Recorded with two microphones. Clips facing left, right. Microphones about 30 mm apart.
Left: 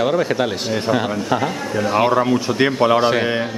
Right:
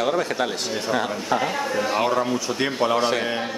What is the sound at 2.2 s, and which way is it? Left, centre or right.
Speech, left.